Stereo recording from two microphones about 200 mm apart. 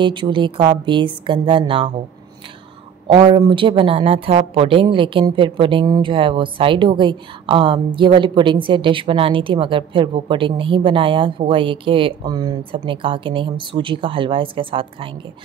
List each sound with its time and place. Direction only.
0.0 s speech: 25° right (ahead or behind)
3.1 s speech: 25° right (ahead or behind)